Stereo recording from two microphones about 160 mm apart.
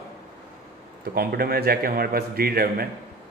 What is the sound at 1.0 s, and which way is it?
A man's voice, 75° right (ahead or behind).